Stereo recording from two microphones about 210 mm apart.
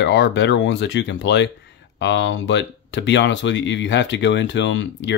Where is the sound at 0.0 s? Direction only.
55° left (ahead or behind).